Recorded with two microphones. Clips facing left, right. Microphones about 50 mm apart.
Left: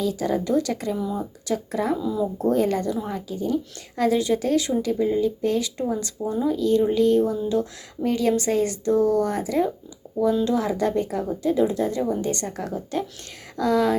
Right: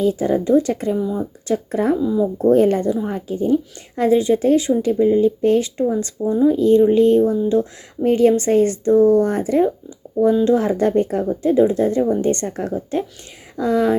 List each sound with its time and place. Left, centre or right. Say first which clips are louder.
0.0 s speech: right 6 dB; right
0.9 s speech: right 6 dB; centre
1.5 s speech: right 6 dB; right
2.0 s speech: right 6 dB; right
2.5 s speech: right 8 dB; right
5.2 s speech: right 7 dB; right